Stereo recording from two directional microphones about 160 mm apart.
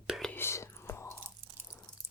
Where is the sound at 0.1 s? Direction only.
5° left (ahead or behind).